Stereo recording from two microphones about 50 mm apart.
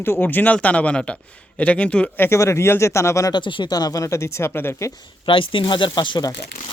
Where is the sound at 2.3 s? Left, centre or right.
Left.